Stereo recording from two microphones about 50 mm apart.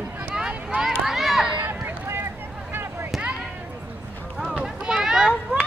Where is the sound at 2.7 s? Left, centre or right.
Right.